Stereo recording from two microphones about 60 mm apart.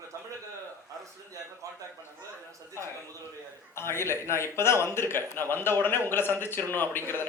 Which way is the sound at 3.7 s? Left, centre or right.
Left.